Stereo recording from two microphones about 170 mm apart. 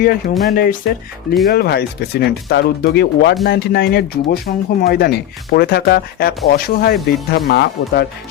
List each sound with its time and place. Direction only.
0.0 s speech: 55° left (ahead or behind); by 8.0 s 70° left (ahead or behind)